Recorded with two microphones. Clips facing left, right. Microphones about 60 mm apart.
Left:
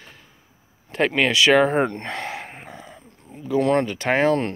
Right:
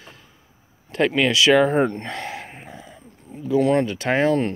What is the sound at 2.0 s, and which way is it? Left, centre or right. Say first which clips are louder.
Gasp: left 1 dB; left.